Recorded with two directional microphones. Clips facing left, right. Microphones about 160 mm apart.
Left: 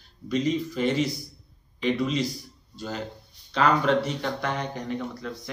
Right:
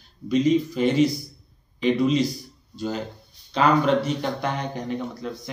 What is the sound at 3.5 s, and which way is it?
Speech, 15° right (ahead or behind).